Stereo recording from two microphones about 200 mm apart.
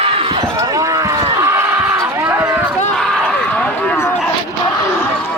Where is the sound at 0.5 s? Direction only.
15° right (ahead or behind).